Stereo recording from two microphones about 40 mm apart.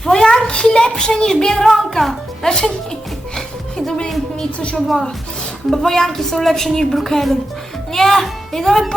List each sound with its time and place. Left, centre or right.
0.0 s a sound: centre
0.3 s a child's voice: left
3.3 s music: centre
5.7 s speech: centre